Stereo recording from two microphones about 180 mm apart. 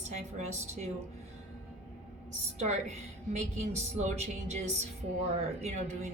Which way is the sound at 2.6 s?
40° right (ahead or behind).